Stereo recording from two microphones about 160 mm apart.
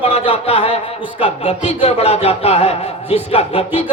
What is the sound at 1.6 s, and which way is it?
A man's voice, 40° left (ahead or behind).